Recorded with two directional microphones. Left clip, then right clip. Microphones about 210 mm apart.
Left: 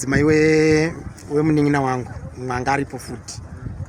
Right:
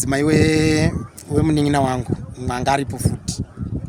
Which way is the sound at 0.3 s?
90° right.